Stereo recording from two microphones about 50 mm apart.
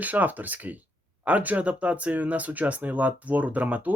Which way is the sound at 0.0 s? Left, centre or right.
Right.